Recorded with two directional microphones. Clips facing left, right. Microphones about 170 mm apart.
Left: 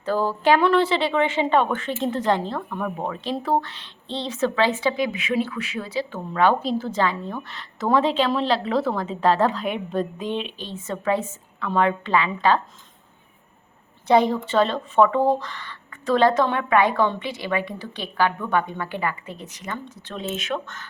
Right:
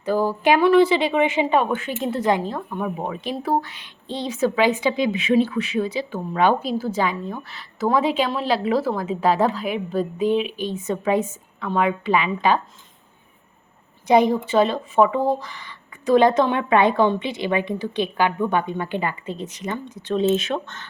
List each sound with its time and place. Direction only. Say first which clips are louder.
0.0 s a woman's voice: right 2 dB; 15° right (ahead or behind)
14.1 s a woman's voice: right 2 dB; 15° right (ahead or behind)